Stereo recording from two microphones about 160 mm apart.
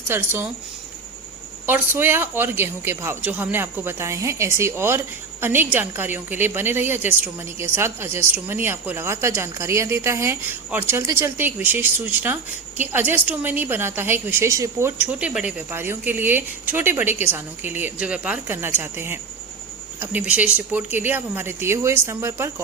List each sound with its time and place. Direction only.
0.1 s a woman's voice: 15° right (ahead or behind)
1.6 s a woman's voice: 15° right (ahead or behind)